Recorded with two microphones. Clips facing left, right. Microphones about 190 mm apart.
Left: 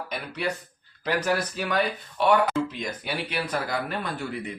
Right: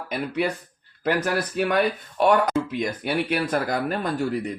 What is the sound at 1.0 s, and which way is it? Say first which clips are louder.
Speech: right 2 dB; 60° right (ahead or behind).